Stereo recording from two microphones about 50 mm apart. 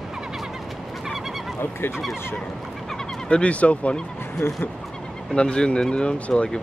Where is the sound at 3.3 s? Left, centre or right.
Left.